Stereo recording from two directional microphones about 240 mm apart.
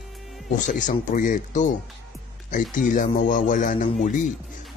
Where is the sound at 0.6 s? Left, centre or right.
Left.